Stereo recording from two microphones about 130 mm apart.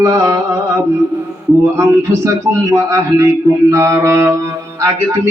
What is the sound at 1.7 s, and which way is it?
Speech, 20° right (ahead or behind).